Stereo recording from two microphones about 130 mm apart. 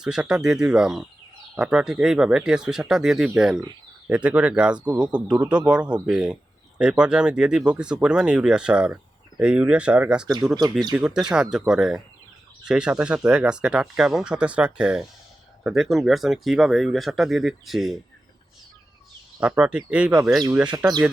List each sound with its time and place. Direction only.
0.0 s speech: 5° right (ahead or behind)
19.4 s speech: 10° right (ahead or behind)
20.7 s speech: 30° right (ahead or behind)